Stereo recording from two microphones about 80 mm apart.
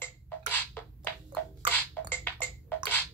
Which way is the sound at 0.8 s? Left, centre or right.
Left.